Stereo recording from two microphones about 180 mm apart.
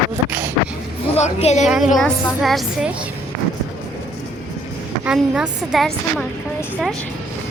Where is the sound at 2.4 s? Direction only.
Centre (ahead or behind).